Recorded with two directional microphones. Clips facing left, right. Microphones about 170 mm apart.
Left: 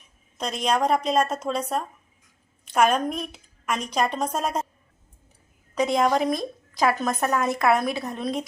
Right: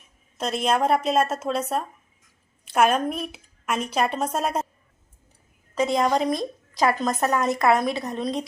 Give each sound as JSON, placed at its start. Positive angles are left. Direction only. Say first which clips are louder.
{"t": 0.3, "sound": "a woman's voice", "louder": "right 1 dB", "side_deg": -5}
{"t": 5.7, "sound": "a woman's voice", "louder": "even", "side_deg": 0}